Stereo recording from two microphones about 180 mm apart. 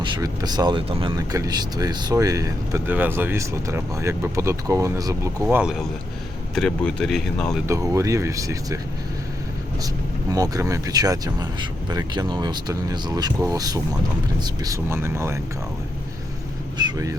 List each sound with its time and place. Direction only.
0.0 s speech: 20° right (ahead or behind)
6.5 s speech: 5° left (ahead or behind)
7.7 s speech: 15° right (ahead or behind)
10.3 s speech: 20° right (ahead or behind)
16.7 s vehicle: 20° right (ahead or behind)